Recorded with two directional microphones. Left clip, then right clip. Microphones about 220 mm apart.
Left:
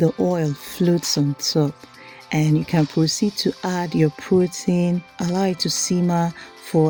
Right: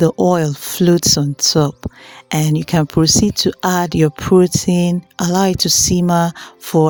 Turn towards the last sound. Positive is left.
turn(degrees=-35)  # may be behind; listen again after turning